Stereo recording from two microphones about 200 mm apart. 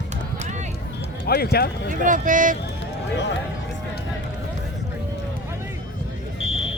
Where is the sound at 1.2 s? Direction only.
50° left (ahead or behind).